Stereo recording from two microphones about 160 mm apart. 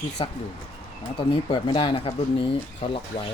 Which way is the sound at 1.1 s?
30° left (ahead or behind).